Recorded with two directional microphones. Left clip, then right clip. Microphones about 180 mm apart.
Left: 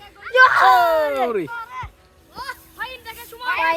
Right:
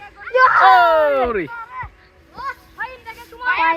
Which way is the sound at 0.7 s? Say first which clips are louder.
Right 3 dB; 5° left (ahead or behind).